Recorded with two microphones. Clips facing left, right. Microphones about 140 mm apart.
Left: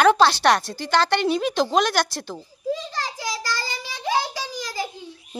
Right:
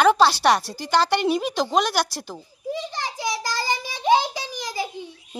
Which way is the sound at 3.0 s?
20° right (ahead or behind).